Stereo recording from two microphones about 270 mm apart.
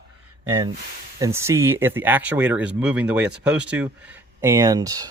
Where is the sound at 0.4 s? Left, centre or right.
Centre.